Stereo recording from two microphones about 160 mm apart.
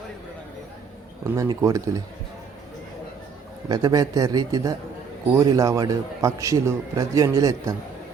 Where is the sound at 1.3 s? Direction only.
20° right (ahead or behind).